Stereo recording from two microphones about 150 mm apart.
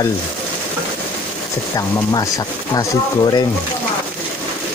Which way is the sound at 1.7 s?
25° left (ahead or behind).